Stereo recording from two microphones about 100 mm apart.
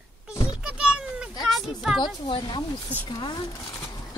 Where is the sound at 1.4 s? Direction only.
Centre (ahead or behind).